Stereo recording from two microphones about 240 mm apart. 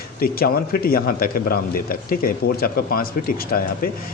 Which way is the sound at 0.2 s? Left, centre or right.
Left.